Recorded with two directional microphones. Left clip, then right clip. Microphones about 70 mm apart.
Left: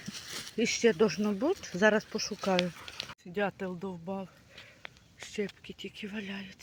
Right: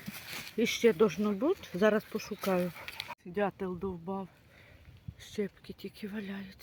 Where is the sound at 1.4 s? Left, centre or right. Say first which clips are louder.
Left 1 dB; right.